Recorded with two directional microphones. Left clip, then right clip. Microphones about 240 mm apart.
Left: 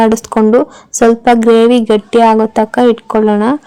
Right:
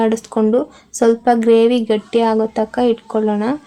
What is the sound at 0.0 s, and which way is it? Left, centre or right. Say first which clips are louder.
A woman's voice: left 6 dB; left.